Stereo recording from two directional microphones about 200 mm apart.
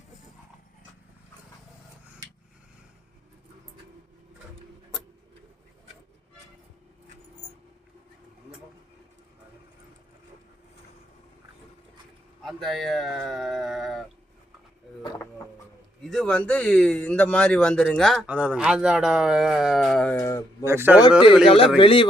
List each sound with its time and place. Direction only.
12.4 s speech: centre (ahead or behind)
15.0 s a sound: 15° left (ahead or behind)
16.0 s speech: 5° left (ahead or behind)
20.1 s a sound: 15° left (ahead or behind)
20.7 s a man's voice: 10° right (ahead or behind)
21.4 s speech: 25° left (ahead or behind)